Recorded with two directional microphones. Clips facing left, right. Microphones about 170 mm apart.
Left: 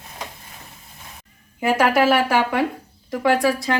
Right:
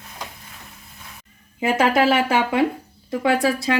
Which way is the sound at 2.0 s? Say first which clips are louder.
Left 1 dB; 20° right (ahead or behind).